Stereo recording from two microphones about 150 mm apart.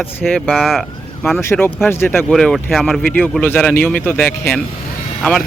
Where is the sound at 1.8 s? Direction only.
15° left (ahead or behind).